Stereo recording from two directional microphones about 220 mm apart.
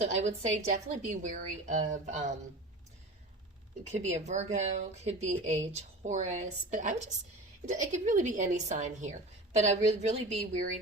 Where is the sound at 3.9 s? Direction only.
30° right (ahead or behind).